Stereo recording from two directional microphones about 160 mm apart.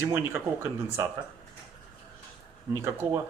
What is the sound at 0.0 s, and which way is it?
Speech, 15° right (ahead or behind).